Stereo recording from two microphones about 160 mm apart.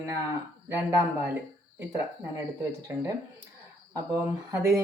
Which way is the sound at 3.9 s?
15° right (ahead or behind).